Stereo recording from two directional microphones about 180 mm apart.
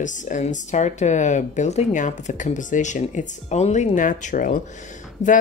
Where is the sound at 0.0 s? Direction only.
45° left (ahead or behind).